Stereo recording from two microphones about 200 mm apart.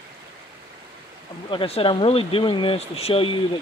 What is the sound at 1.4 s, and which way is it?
Speech, 25° left (ahead or behind).